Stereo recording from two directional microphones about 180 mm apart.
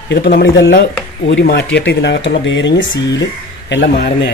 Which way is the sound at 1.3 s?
65° left (ahead or behind).